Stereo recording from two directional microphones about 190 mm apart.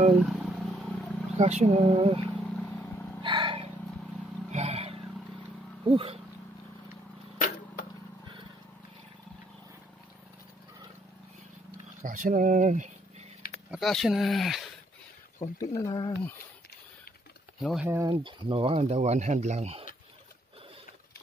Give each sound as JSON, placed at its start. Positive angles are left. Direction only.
{"t": 0.1, "sound": "wild animals", "side_deg": 0}
{"t": 1.4, "sound": "speech", "side_deg": -35}
{"t": 2.2, "sound": "vehicle", "side_deg": 10}
{"t": 3.2, "sound": "vehicle", "side_deg": -25}
{"t": 5.9, "sound": "speech", "side_deg": -25}
{"t": 7.3, "sound": "arrow", "side_deg": 45}
{"t": 12.0, "sound": "speech", "side_deg": -40}
{"t": 13.7, "sound": "speech", "side_deg": 0}
{"t": 15.6, "sound": "speech", "side_deg": 20}
{"t": 17.6, "sound": "speech", "side_deg": 0}
{"t": 17.8, "sound": "speech", "side_deg": -15}
{"t": 18.2, "sound": "speech", "side_deg": -30}